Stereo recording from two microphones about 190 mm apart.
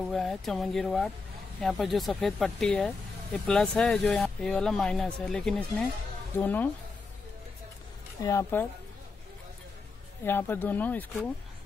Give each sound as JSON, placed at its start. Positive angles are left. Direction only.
{"t": 0.0, "sound": "speech", "side_deg": 0}
{"t": 8.2, "sound": "speech", "side_deg": 15}
{"t": 10.2, "sound": "speech", "side_deg": 10}